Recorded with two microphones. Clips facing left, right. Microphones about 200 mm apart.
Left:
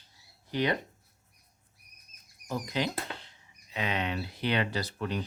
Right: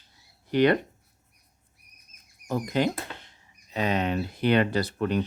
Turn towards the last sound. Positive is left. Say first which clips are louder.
# right 7 dB
turn(degrees=-55)  # may be behind; listen again after turning